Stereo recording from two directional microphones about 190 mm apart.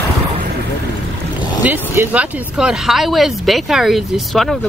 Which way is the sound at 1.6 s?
10° right (ahead or behind).